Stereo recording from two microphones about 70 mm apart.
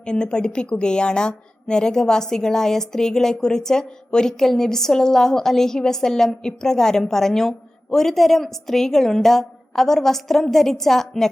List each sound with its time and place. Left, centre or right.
0.0 s a woman's voice: centre